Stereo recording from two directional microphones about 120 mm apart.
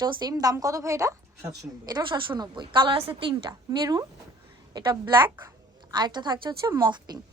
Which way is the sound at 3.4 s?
35° right (ahead or behind).